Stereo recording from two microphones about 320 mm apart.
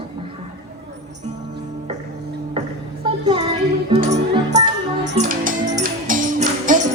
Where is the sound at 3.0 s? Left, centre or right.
Centre.